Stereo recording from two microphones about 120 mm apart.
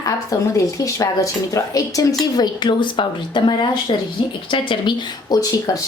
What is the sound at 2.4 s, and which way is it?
A woman's voice, 40° left (ahead or behind).